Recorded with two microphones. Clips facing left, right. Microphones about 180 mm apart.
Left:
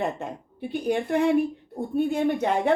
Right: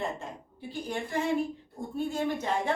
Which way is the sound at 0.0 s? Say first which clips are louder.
Left 6 dB; 65° left (ahead or behind).